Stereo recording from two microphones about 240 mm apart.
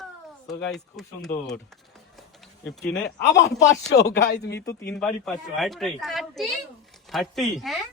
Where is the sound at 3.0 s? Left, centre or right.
Left.